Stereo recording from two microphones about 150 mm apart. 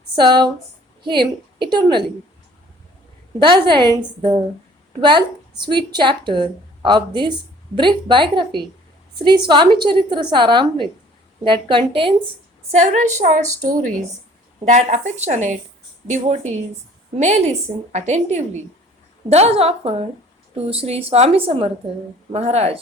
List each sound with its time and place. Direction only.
0.2 s a woman's voice: 30° right (ahead or behind)
3.3 s a woman's voice: 30° right (ahead or behind)
12.7 s a woman's voice: 50° right (ahead or behind)